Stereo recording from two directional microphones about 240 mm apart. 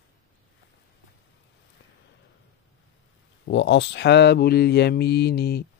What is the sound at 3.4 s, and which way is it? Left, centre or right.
Speech, left.